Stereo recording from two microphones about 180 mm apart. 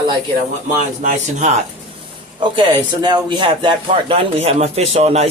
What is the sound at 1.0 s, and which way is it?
Speech, 45° right (ahead or behind).